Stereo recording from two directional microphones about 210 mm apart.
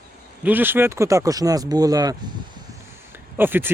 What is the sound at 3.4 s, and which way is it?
Speech, 10° right (ahead or behind).